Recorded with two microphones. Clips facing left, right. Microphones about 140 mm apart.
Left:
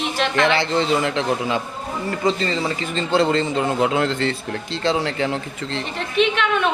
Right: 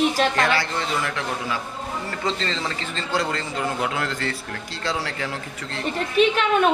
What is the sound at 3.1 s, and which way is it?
Speech, 25° left (ahead or behind).